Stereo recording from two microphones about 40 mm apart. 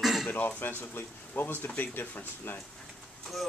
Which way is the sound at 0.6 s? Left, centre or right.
Left.